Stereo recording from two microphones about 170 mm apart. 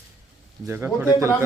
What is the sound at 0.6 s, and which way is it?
Speech, 15° right (ahead or behind).